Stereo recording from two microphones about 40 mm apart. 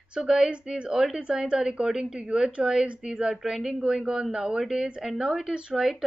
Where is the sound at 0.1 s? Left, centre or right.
Centre.